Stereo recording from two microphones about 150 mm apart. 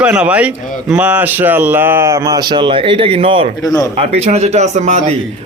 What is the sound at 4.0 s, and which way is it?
Speech, 45° right (ahead or behind).